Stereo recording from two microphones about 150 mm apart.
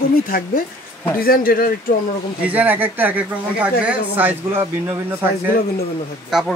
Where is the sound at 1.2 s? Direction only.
75° left (ahead or behind).